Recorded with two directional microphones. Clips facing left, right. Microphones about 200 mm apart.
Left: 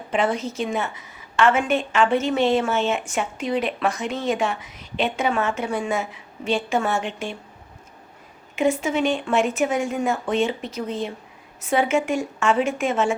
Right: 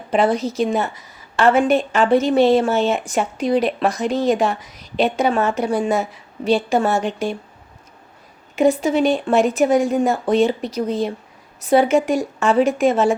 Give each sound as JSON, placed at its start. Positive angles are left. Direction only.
{"t": 0.1, "sound": "a woman's voice", "side_deg": -35}
{"t": 8.5, "sound": "a woman's voice", "side_deg": -35}